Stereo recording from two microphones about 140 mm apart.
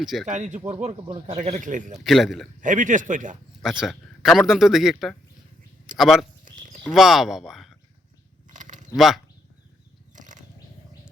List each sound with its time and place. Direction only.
0.0 s speech: centre (ahead or behind)
0.3 s speech: 60° right (ahead or behind)
1.0 s speech: 35° right (ahead or behind)
1.4 s speech: 60° right (ahead or behind)
2.0 s speech: centre (ahead or behind)
2.6 s speech: 65° right (ahead or behind)
3.6 s speech: 5° right (ahead or behind)
8.4 s a sound: 65° right (ahead or behind)
9.0 s speech: centre (ahead or behind)
10.2 s a sound: 65° right (ahead or behind)